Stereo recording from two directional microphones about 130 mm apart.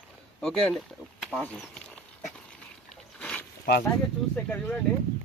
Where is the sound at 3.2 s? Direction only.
10° left (ahead or behind).